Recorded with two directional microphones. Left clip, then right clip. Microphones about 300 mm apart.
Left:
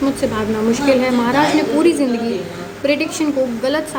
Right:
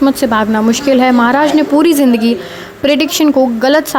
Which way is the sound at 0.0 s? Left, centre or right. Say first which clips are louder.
Right 7 dB; right.